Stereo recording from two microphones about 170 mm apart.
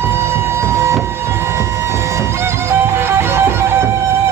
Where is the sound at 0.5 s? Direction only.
15° right (ahead or behind).